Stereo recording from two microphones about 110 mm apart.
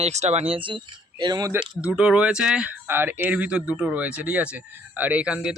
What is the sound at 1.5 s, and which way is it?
Speech, 10° right (ahead or behind).